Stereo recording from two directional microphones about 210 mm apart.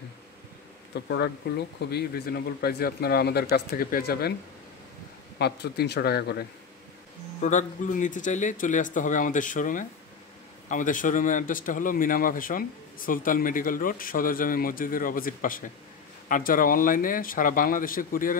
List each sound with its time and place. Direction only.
0.9 s speech: 55° left (ahead or behind)
5.4 s speech: 50° left (ahead or behind)
7.4 s speech: 35° left (ahead or behind)